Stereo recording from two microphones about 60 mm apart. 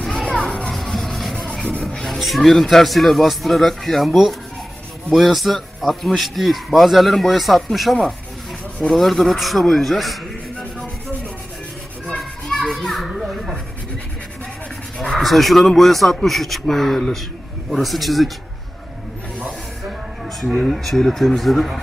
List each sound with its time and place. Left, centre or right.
0.0 s children playing: centre
0.3 s children playing: centre
0.7 s rub: centre
1.5 s rub: centre
2.0 s speech: centre
12.0 s children playing: centre
14.9 s speech: centre
20.2 s speech: centre